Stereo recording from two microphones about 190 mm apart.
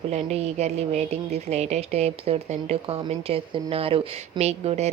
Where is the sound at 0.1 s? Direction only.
35° right (ahead or behind).